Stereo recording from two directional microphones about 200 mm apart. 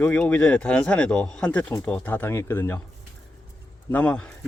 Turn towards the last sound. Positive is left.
turn(degrees=5)  # may be behind; listen again after turning